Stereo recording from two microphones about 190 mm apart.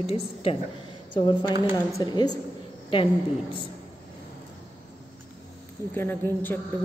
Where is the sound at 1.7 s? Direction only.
20° left (ahead or behind).